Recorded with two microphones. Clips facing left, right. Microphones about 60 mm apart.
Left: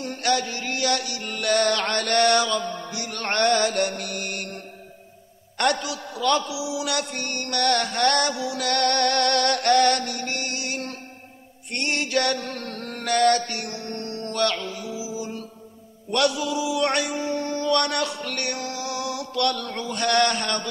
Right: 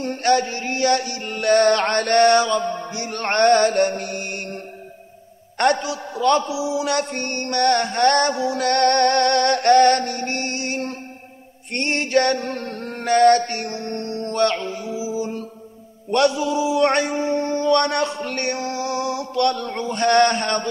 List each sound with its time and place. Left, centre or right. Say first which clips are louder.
0.0 s a man's voice: right 5 dB; right
5.6 s a man's voice: right 4 dB; right
11.7 s mantra: right 5 dB; right
16.1 s a man's voice: right 5 dB; right